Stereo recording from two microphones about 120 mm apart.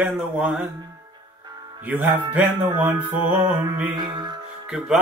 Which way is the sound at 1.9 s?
15° right (ahead or behind).